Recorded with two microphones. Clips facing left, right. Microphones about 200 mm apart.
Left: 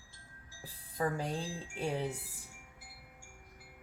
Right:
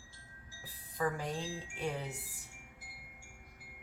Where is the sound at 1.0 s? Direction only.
30° left (ahead or behind).